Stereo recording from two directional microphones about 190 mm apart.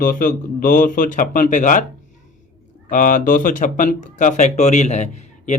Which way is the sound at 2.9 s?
45° left (ahead or behind).